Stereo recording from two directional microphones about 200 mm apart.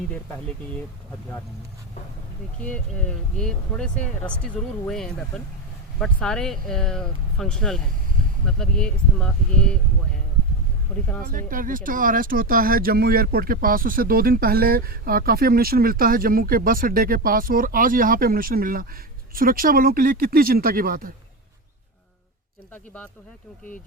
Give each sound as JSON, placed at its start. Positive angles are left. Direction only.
{"t": 2.6, "sound": "speech", "side_deg": 5}
{"t": 11.3, "sound": "speech", "side_deg": -45}